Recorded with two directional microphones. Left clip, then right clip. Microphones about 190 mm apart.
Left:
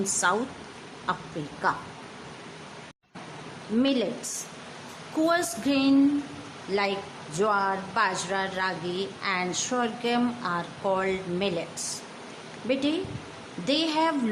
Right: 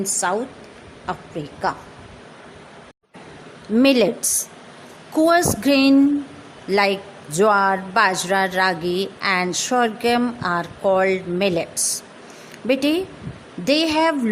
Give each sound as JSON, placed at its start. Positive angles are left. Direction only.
{"t": 0.0, "sound": "a woman's voice", "side_deg": -25}
{"t": 3.8, "sound": "speech", "side_deg": -40}